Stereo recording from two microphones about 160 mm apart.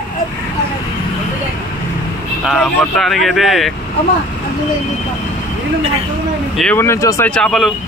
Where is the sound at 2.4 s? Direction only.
5° left (ahead or behind).